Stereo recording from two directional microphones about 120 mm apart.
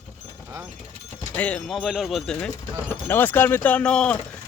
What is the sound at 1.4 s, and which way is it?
Speech, 10° left (ahead or behind).